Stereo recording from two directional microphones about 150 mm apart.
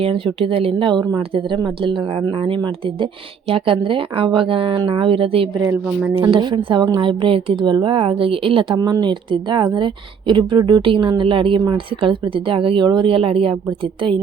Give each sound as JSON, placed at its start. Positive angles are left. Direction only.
{"t": 0.0, "sound": "speech", "side_deg": -35}
{"t": 5.8, "sound": "speech", "side_deg": -10}
{"t": 6.1, "sound": "speech", "side_deg": -35}